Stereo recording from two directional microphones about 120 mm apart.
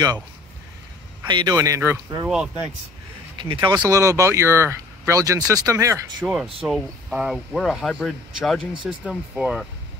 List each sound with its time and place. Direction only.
1.2 s speech: 35° right (ahead or behind)
2.2 s speech: 10° right (ahead or behind)
3.3 s speech: 45° right (ahead or behind); by 6.0 s 25° right (ahead or behind)
6.2 s speech: 5° right (ahead or behind)